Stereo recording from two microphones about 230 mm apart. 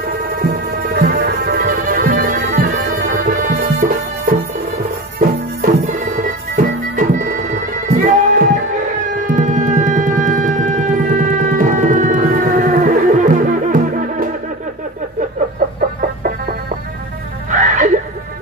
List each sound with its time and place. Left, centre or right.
0.4 s music: right
15.6 s music: right